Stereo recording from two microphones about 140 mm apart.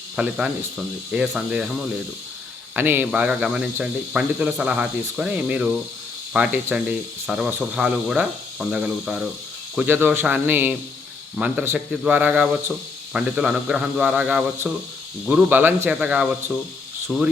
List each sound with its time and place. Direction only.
0.2 s speech: 5° right (ahead or behind)